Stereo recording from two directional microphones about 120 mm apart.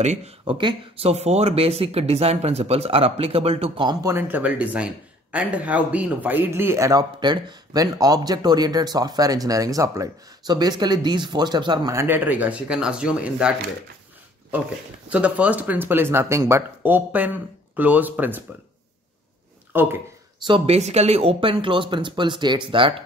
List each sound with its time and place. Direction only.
0.0 s speech: 75° right (ahead or behind)
0.5 s speech: 45° right (ahead or behind)
1.0 s speech: 65° right (ahead or behind)
4.0 s speech: 20° right (ahead or behind); by 11.9 s 35° right (ahead or behind)
11.9 s speech: 20° right (ahead or behind)
15.0 s speech: 10° right (ahead or behind)
19.7 s speech: 15° right (ahead or behind)
20.4 s speech: 45° right (ahead or behind)
20.7 s speech: 65° right (ahead or behind); by 23.0 s 45° right (ahead or behind)